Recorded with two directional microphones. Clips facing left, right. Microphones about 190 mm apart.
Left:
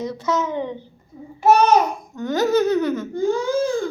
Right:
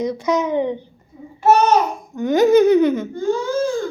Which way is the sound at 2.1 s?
15° right (ahead or behind).